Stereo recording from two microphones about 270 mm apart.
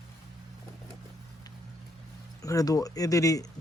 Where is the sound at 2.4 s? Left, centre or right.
Centre.